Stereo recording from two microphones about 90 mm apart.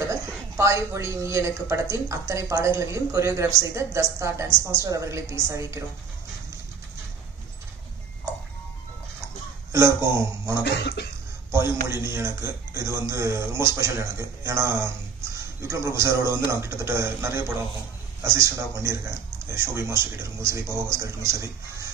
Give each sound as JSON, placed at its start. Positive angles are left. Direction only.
{"t": 0.6, "sound": "a woman's voice", "side_deg": -35}
{"t": 9.7, "sound": "a woman's voice", "side_deg": -30}